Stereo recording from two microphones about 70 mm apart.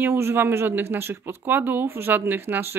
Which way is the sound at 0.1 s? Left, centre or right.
Right.